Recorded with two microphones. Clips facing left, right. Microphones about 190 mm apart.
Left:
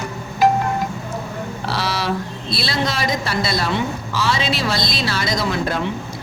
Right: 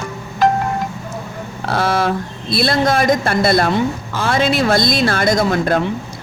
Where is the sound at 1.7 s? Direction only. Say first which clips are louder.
Right 6 dB; 50° right (ahead or behind).